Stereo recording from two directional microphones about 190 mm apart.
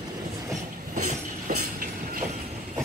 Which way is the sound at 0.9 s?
45° right (ahead or behind).